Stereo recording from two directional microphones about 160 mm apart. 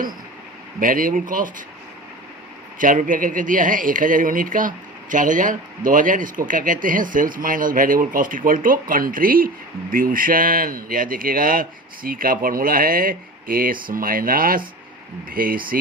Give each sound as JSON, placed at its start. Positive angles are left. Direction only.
{"t": 0.8, "sound": "speech", "side_deg": -60}
{"t": 2.7, "sound": "speech", "side_deg": -55}